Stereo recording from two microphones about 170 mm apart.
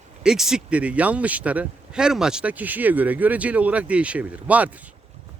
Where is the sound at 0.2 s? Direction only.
5° right (ahead or behind).